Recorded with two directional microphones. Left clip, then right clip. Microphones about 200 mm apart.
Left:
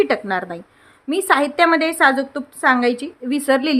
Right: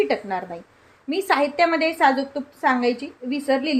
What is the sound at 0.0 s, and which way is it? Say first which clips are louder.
A woman's voice: left 4 dB; 25° left (ahead or behind).